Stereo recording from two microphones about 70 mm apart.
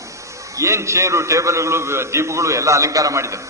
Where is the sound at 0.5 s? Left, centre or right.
Right.